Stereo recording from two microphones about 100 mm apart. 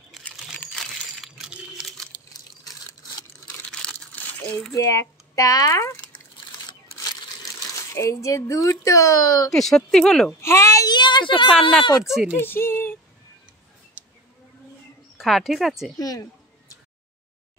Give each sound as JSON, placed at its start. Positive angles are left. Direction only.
{"t": 0.1, "sound": "crumpling", "side_deg": 0}
{"t": 3.8, "sound": "crumpling", "side_deg": 15}
{"t": 4.8, "sound": "speech", "side_deg": 35}
{"t": 7.0, "sound": "crumpling", "side_deg": 35}
{"t": 9.5, "sound": "speech", "side_deg": 5}
{"t": 10.4, "sound": "a child's voice", "side_deg": 30}
{"t": 11.9, "sound": "speech", "side_deg": -5}
{"t": 12.4, "sound": "speech", "side_deg": 25}
{"t": 14.0, "sound": "a sound", "side_deg": -20}
{"t": 15.1, "sound": "speech", "side_deg": 0}
{"t": 16.0, "sound": "a sound", "side_deg": 40}